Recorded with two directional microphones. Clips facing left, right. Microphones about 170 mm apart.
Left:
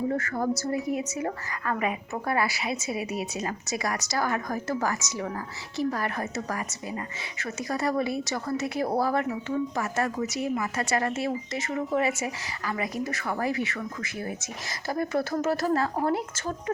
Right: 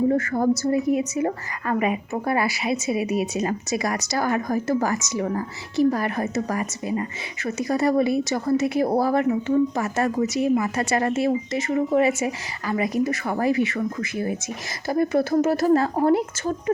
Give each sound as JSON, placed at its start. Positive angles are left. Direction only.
{"t": 0.1, "sound": "speech", "side_deg": -20}
{"t": 5.2, "sound": "speech", "side_deg": -30}
{"t": 5.7, "sound": "speech", "side_deg": -15}